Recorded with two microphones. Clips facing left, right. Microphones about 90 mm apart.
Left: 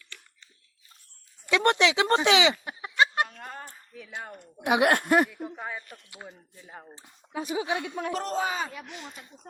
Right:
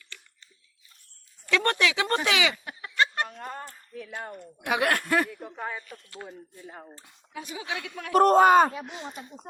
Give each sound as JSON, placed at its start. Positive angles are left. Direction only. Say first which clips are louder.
{"t": 1.5, "sound": "speech", "louder": "left 2 dB", "side_deg": 20}
{"t": 3.4, "sound": "a sound", "louder": "right 3 dB", "side_deg": 0}
{"t": 4.6, "sound": "speech", "louder": "left 3 dB", "side_deg": 20}
{"t": 5.3, "sound": "a woman's voice", "louder": "right 1 dB", "side_deg": 5}
{"t": 7.5, "sound": "speech", "louder": "left 6 dB", "side_deg": 25}
{"t": 8.1, "sound": "speech", "louder": "right 15 dB", "side_deg": -50}
{"t": 8.7, "sound": "speech", "louder": "right 4 dB", "side_deg": -30}